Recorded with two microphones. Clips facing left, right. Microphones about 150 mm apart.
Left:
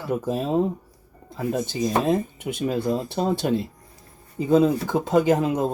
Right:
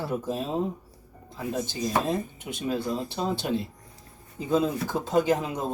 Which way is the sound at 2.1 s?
60° left (ahead or behind).